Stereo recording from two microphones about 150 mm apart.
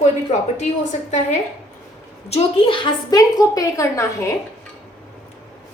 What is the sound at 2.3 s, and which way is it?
A woman's voice, 35° left (ahead or behind).